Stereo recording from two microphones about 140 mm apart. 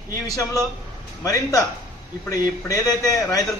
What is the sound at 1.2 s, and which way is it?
A man's voice, 20° left (ahead or behind).